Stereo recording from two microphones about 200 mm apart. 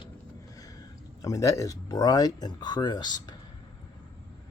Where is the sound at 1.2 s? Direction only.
15° left (ahead or behind).